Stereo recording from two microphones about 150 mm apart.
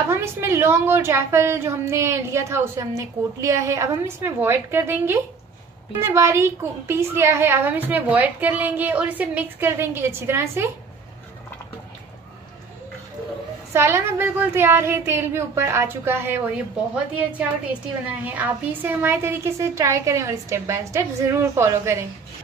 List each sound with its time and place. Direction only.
0.1 s a woman's voice: 15° right (ahead or behind)
13.7 s a woman's voice: 15° right (ahead or behind)
18.2 s a woman's voice: 10° right (ahead or behind)